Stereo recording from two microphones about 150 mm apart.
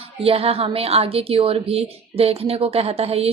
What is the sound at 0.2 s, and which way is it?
A woman's voice, 40° right (ahead or behind).